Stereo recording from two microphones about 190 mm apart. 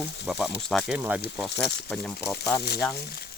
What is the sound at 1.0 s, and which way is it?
Speech, 10° right (ahead or behind).